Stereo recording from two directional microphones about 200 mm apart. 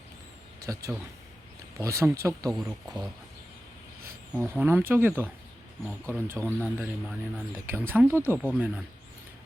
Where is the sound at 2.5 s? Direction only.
Centre (ahead or behind).